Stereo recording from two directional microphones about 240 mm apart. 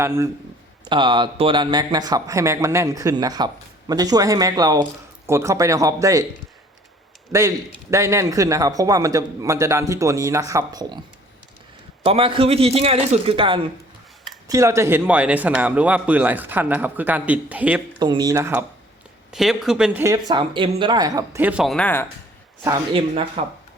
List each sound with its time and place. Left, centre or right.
0.0 s a man's voice: centre
7.3 s a man's voice: centre
12.0 s a man's voice: right; by 17.8 s centre
18.0 s a man's voice: centre
22.6 s a man's voice: centre